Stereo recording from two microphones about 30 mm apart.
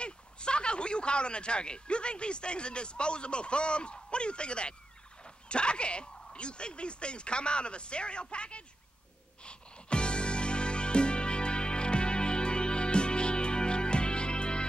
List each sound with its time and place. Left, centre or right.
0.0 s speech: left
9.4 s music: left